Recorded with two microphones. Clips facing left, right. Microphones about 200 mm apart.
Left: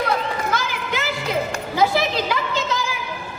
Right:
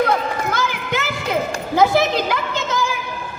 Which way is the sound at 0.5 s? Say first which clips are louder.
Right 2 dB; 55° right (ahead or behind).